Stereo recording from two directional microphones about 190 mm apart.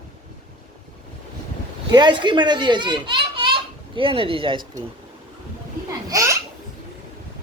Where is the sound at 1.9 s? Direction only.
25° right (ahead or behind).